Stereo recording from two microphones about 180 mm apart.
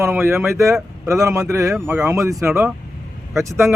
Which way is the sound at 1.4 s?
20° right (ahead or behind).